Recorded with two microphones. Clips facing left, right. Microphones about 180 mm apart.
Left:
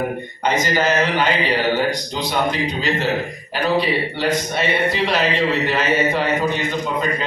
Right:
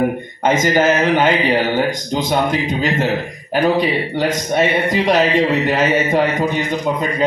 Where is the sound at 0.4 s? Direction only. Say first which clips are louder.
Right 5 dB; 45° right (ahead or behind).